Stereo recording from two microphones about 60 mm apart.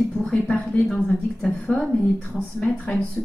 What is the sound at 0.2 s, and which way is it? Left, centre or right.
Speech, centre.